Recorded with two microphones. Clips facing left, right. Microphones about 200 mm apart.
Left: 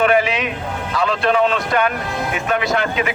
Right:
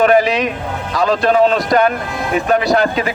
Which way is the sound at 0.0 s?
40° right (ahead or behind).